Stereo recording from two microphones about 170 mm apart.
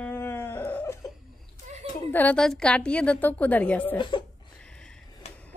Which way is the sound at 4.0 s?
30° left (ahead or behind).